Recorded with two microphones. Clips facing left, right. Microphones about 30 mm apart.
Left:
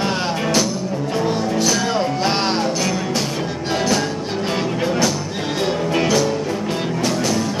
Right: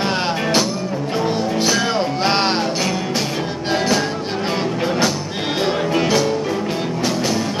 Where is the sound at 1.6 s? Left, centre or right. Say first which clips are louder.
Right 1 dB; right.